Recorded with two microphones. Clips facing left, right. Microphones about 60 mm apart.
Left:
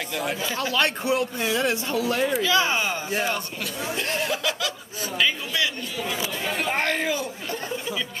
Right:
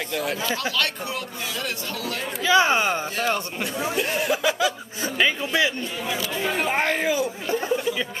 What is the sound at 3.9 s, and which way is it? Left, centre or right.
Speech, centre.